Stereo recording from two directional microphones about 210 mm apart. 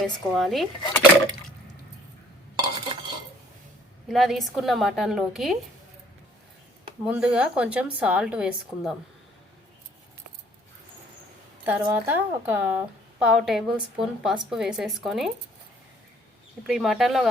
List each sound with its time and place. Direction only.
0.0 s a woman's voice: centre (ahead or behind)
2.6 s stir: 20° right (ahead or behind)
4.1 s a woman's voice: centre (ahead or behind)
7.0 s a woman's voice: 5° right (ahead or behind)
11.6 s a woman's voice: 10° right (ahead or behind)
16.6 s a woman's voice: centre (ahead or behind)